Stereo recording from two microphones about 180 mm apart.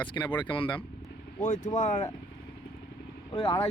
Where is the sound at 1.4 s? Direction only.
45° left (ahead or behind).